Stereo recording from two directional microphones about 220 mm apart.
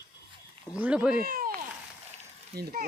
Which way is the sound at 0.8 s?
5° right (ahead or behind).